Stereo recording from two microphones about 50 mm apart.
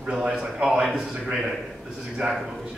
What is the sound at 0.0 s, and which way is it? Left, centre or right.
A man's voice, centre.